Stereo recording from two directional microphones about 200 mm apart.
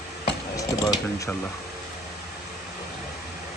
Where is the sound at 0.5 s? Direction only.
15° left (ahead or behind).